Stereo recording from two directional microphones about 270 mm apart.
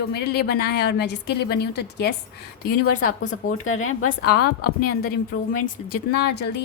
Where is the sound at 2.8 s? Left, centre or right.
Left.